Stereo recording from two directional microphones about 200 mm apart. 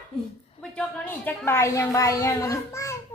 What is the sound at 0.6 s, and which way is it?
A woman's voice, 5° left (ahead or behind).